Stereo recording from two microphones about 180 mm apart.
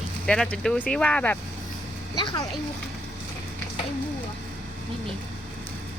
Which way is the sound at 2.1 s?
25° left (ahead or behind).